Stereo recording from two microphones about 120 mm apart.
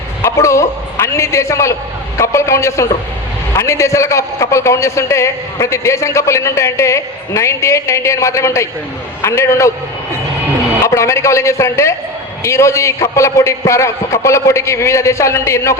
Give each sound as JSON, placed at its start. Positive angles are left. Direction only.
{"t": 0.2, "sound": "a man's voice", "side_deg": 25}
{"t": 10.8, "sound": "a man's voice", "side_deg": 25}